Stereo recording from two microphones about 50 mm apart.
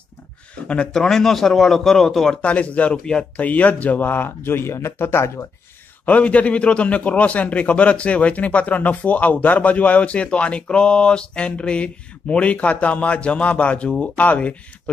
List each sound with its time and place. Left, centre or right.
0.9 s speech: centre
2.4 s a man's voice: left
6.0 s a man's voice: left